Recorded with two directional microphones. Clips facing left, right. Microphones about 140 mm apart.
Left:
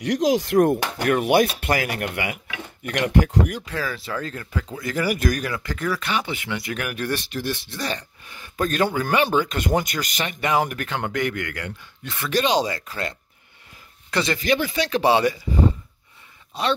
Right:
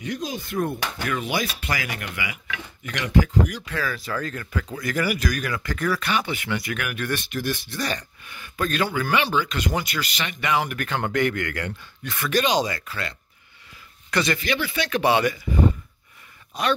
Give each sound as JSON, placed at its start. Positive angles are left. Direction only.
{"t": 0.0, "sound": "speech", "side_deg": 90}
{"t": 3.6, "sound": "speech", "side_deg": 30}
{"t": 5.1, "sound": "speech", "side_deg": 45}
{"t": 5.4, "sound": "speech", "side_deg": 30}
{"t": 10.8, "sound": "speech", "side_deg": 15}
{"t": 12.0, "sound": "speech", "side_deg": 25}
{"t": 14.1, "sound": "speech", "side_deg": 25}
{"t": 14.4, "sound": "speech", "side_deg": 45}
{"t": 16.5, "sound": "speech", "side_deg": 25}